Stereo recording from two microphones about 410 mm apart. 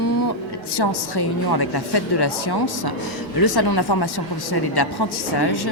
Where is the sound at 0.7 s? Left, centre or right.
Left.